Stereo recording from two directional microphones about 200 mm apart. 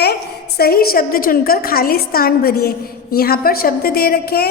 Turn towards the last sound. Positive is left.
turn(degrees=50)  # may be behind; listen again after turning